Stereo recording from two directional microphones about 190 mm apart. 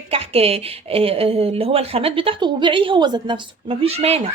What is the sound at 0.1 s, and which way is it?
A woman's voice, 30° right (ahead or behind).